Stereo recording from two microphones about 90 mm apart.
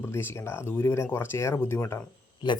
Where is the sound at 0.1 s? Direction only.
30° left (ahead or behind).